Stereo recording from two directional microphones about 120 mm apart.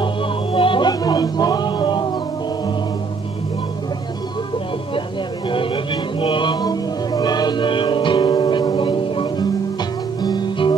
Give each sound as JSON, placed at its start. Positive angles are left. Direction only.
{"t": 0.0, "sound": "music", "side_deg": 45}
{"t": 6.2, "sound": "music", "side_deg": 40}